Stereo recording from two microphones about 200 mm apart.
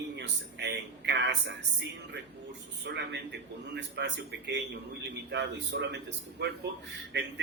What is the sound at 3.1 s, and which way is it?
A man's voice, 60° right (ahead or behind).